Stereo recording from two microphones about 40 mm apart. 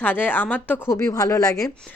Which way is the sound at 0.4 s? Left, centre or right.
Left.